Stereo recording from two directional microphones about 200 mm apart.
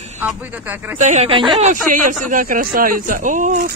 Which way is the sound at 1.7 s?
40° right (ahead or behind).